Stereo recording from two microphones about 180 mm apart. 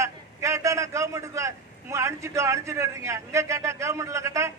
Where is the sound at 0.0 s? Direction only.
15° right (ahead or behind).